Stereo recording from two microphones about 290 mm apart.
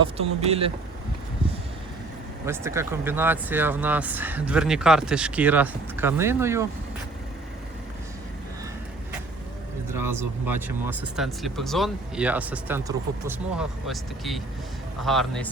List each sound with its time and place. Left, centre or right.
0.0 s speech: right
2.5 s speech: centre
9.9 s speech: centre